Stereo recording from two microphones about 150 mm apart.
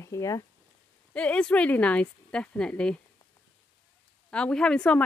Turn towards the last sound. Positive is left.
turn(degrees=5)  # may be behind; listen again after turning